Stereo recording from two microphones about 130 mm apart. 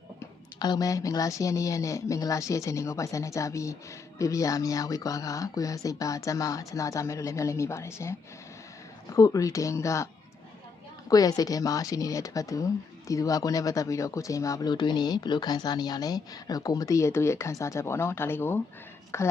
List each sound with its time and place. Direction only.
0.6 s speech: 30° left (ahead or behind)
9.1 s speech: 25° left (ahead or behind)
11.1 s speech: 30° left (ahead or behind)